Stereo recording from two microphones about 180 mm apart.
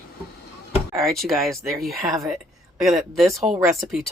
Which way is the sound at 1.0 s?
Centre (ahead or behind).